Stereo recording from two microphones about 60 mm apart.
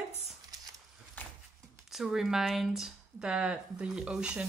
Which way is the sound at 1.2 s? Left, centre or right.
Left.